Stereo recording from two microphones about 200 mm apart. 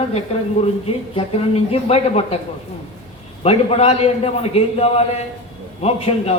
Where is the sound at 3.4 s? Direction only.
30° left (ahead or behind).